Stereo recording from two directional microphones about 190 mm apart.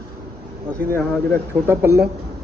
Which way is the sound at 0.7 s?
15° right (ahead or behind).